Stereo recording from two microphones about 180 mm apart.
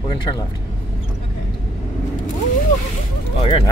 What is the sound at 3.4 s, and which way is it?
Speech, 25° left (ahead or behind).